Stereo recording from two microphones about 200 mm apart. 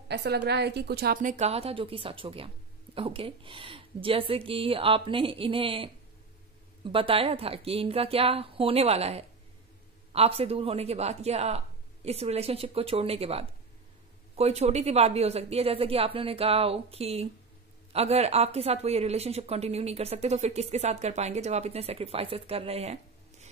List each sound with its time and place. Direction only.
0.1 s a woman's voice: 55° right (ahead or behind); by 22.9 s 30° right (ahead or behind)